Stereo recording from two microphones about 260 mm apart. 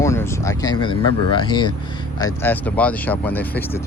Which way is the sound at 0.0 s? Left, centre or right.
Centre.